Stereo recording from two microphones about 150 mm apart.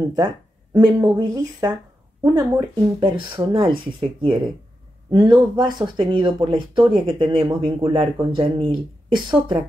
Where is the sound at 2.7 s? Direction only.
30° right (ahead or behind).